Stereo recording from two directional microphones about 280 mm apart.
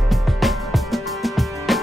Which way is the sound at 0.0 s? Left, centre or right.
Centre.